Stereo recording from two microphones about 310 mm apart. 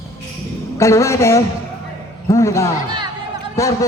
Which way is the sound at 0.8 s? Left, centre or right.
Centre.